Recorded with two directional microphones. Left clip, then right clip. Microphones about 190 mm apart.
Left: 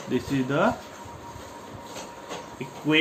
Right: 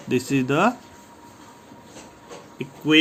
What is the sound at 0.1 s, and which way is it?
Speech, 55° right (ahead or behind).